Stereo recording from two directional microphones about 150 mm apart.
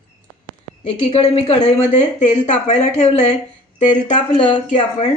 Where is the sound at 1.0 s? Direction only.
40° left (ahead or behind).